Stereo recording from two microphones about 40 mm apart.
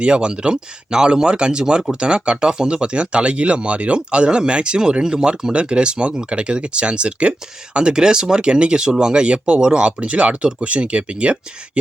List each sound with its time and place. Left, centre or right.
0.0 s speech: right